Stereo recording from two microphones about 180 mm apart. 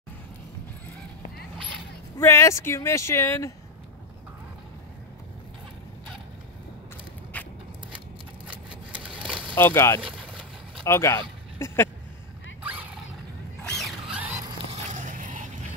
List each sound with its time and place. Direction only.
2.1 s speech: 15° left (ahead or behind)
7.3 s biting: 10° left (ahead or behind)
9.1 s a sound: 5° right (ahead or behind)
9.6 s speech: 10° left (ahead or behind)
10.0 s vehicle: 5° left (ahead or behind)
10.9 s speech: 15° left (ahead or behind)
13.7 s zipper: centre (ahead or behind)
14.7 s biting: 40° right (ahead or behind)